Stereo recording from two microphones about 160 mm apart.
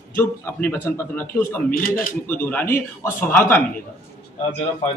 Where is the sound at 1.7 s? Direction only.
65° left (ahead or behind).